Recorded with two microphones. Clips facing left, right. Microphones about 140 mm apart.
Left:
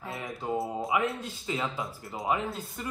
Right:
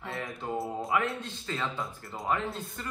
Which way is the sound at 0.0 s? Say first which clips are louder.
Left 1 dB; centre (ahead or behind).